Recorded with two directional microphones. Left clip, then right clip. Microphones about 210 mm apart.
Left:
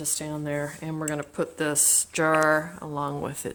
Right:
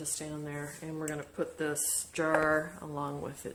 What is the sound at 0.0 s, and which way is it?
Speech, 45° left (ahead or behind).